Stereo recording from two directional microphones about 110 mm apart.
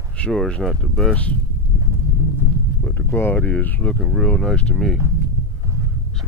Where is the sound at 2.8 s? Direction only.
20° left (ahead or behind); by 5.0 s centre (ahead or behind).